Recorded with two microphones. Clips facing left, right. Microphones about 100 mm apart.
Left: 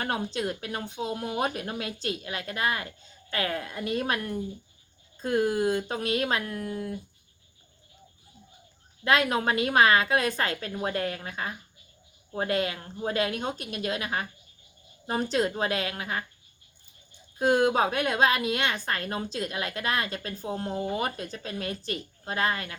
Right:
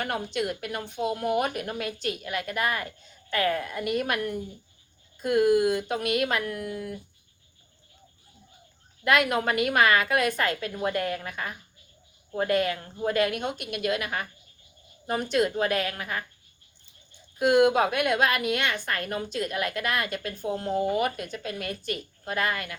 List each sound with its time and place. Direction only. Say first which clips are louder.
0.0 s a woman's voice: right 1 dB; 35° left (ahead or behind)
9.0 s a woman's voice: right 1 dB; 30° left (ahead or behind)
17.3 s a woman's voice: right 2 dB; 35° left (ahead or behind)